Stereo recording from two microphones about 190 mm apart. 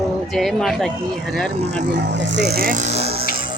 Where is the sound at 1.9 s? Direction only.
65° right (ahead or behind); by 3.2 s 35° right (ahead or behind).